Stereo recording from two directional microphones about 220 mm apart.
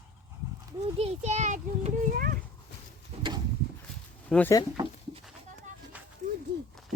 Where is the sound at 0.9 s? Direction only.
30° right (ahead or behind).